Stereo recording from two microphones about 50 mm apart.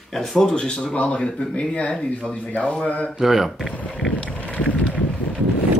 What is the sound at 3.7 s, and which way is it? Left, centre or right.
Vehicle, left.